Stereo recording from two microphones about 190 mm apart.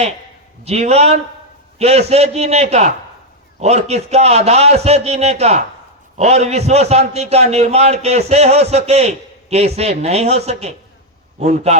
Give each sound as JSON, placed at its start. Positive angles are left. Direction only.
{"t": 0.6, "sound": "a man's voice", "side_deg": -35}